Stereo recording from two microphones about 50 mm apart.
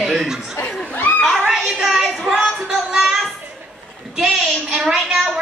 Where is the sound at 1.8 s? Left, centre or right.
Centre.